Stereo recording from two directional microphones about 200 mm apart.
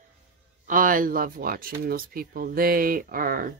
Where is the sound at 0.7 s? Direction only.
45° right (ahead or behind).